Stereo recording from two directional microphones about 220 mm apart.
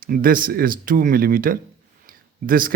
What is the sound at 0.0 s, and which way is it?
Speech, 40° right (ahead or behind).